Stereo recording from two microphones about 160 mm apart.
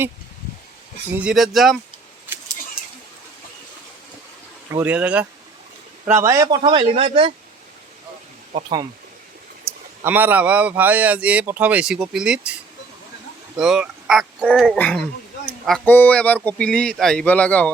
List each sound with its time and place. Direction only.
1.2 s speech: centre (ahead or behind)
4.7 s a man's voice: 10° right (ahead or behind)
6.6 s speech: 35° right (ahead or behind)
9.6 s speech: 15° right (ahead or behind)
13.6 s speech: 5° right (ahead or behind)